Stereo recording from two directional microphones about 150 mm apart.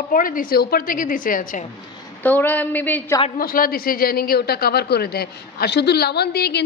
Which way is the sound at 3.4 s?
80° left.